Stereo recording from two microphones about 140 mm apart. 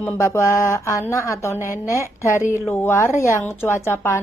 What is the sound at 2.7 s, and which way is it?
A woman's voice, 20° left (ahead or behind).